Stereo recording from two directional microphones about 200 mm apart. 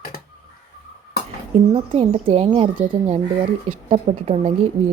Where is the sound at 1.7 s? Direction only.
30° right (ahead or behind).